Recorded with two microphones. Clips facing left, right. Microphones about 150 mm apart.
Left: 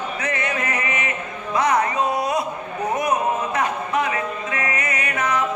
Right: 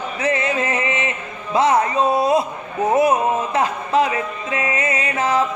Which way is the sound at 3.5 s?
25° right (ahead or behind).